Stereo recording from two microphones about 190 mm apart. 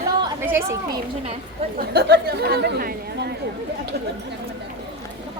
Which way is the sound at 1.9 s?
60° right (ahead or behind).